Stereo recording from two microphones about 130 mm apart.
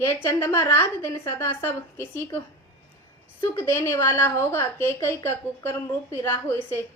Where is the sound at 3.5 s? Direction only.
20° left (ahead or behind).